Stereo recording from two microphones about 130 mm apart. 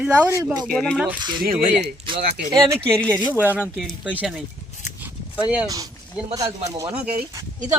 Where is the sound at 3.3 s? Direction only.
10° right (ahead or behind).